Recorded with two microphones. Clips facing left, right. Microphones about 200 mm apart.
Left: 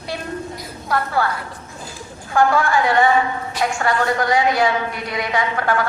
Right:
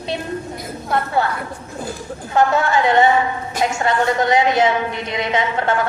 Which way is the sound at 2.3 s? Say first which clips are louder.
Even; 25° right (ahead or behind).